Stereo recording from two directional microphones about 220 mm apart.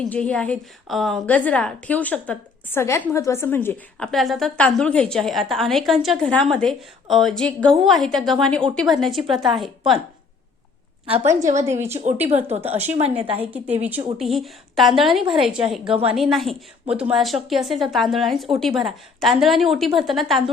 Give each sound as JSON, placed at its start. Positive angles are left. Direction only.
{"t": 0.0, "sound": "a woman's voice", "side_deg": 5}
{"t": 11.0, "sound": "a woman's voice", "side_deg": -30}
{"t": 11.6, "sound": "a woman's voice", "side_deg": -10}
{"t": 12.3, "sound": "a woman's voice", "side_deg": -30}
{"t": 13.7, "sound": "a woman's voice", "side_deg": -5}